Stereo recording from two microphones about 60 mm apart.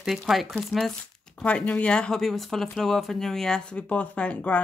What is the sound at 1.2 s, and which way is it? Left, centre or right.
Speech, centre.